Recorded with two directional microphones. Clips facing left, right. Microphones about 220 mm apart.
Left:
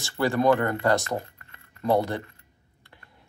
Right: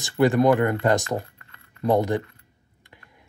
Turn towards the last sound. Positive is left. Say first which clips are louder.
# right 2 dB
turn(degrees=-15)  # may be behind; listen again after turning